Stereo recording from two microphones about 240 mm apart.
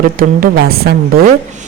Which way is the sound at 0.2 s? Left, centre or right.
Right.